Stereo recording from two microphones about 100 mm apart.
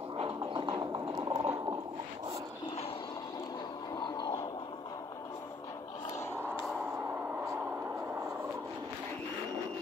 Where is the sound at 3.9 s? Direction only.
50° left (ahead or behind).